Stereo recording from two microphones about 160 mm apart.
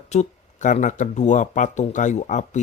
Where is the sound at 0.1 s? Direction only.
50° left (ahead or behind).